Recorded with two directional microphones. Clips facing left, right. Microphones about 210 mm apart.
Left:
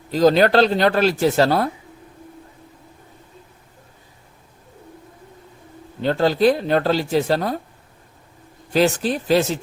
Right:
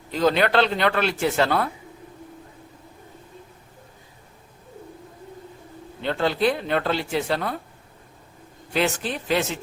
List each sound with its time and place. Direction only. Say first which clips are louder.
0.1 s speech: left 6 dB; 35° left (ahead or behind)
6.0 s speech: left 5 dB; 40° left (ahead or behind)
8.7 s speech: left 6 dB; 35° left (ahead or behind)